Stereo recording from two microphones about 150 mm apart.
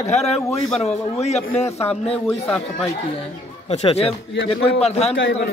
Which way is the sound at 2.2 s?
15° left (ahead or behind).